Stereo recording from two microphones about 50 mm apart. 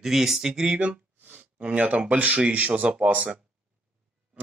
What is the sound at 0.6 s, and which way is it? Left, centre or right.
Speech, right.